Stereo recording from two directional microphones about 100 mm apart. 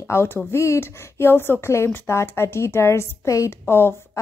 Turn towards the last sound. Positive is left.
turn(degrees=25)  # may be behind; listen again after turning